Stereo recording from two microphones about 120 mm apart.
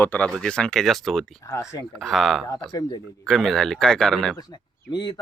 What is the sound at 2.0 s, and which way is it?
Speech, centre (ahead or behind).